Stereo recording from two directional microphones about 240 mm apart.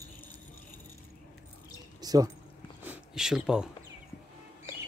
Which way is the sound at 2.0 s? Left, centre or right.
Centre.